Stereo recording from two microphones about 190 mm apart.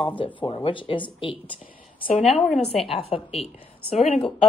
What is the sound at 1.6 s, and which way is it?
Speech, 45° left (ahead or behind).